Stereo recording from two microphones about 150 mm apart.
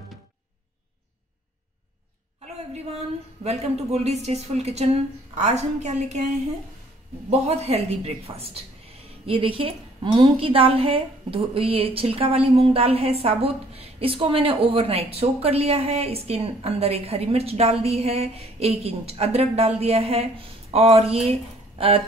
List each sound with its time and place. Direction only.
3.4 s a woman's voice: 45° right (ahead or behind)
7.2 s a woman's voice: 45° right (ahead or behind)